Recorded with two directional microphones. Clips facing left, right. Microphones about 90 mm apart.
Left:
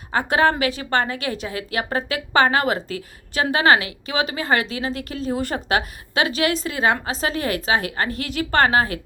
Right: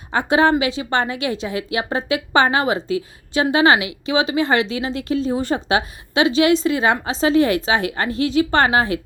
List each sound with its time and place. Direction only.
0.1 s a woman's voice: 20° right (ahead or behind)
3.8 s speech: 40° left (ahead or behind)
4.1 s a woman's voice: 25° right (ahead or behind)